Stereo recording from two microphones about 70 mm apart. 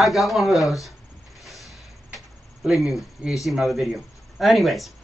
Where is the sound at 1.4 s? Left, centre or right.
Centre.